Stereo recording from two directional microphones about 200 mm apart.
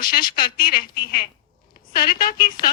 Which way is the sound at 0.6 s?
45° left (ahead or behind).